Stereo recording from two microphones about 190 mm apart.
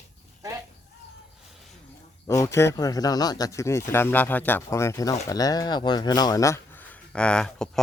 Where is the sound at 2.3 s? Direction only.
15° left (ahead or behind).